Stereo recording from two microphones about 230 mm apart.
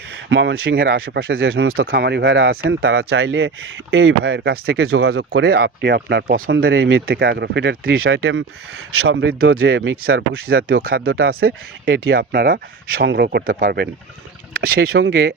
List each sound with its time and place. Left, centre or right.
0.3 s speech: right
1.7 s speech: right
2.6 s speech: right
4.4 s speech: right
10.4 s speech: right